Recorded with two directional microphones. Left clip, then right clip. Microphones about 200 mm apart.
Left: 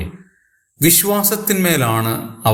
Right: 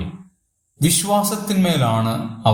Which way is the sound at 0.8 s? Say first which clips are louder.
Left 2 dB; 40° left (ahead or behind).